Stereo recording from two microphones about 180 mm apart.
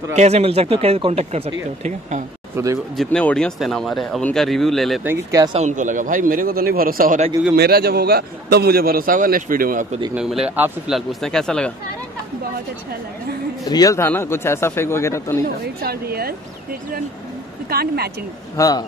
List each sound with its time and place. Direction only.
0.1 s speech: 35° right (ahead or behind)
2.5 s speech: 15° right (ahead or behind)
3.0 s speech: 5° left (ahead or behind)
5.0 s speech: 15° right (ahead or behind)
5.5 s a man's voice: 40° right (ahead or behind)
7.5 s a man's voice: 60° right (ahead or behind)
10.1 s speech: 5° right (ahead or behind)
13.7 s speech: 20° left (ahead or behind)
15.4 s a man's voice: 60° right (ahead or behind)
17.6 s a man's voice: 60° right (ahead or behind)
18.6 s a man's voice: 20° left (ahead or behind)